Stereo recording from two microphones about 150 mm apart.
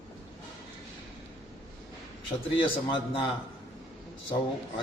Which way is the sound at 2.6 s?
35° left (ahead or behind).